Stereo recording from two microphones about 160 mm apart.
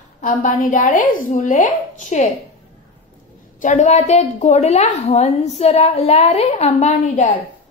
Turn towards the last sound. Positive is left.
turn(degrees=45)  # may be behind; listen again after turning